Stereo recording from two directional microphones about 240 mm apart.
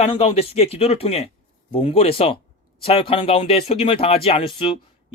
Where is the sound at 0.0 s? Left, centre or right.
Left.